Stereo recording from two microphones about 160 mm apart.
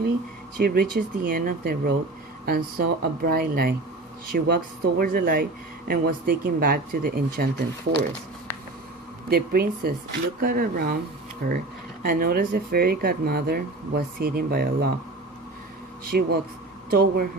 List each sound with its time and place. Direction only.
0.6 s speech: 70° right (ahead or behind)
9.3 s speech: 70° right (ahead or behind)
12.0 s speech: 65° right (ahead or behind)
16.0 s speech: 75° right (ahead or behind)